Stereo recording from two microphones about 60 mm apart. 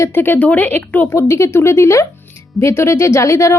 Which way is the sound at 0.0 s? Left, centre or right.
Left.